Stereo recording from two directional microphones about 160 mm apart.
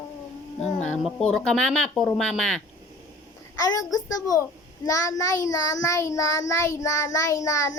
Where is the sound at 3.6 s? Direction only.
20° left (ahead or behind).